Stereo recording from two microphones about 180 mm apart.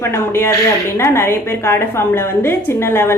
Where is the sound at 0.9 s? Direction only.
15° left (ahead or behind).